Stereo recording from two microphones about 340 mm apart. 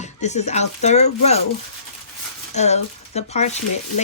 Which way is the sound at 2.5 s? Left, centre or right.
Centre.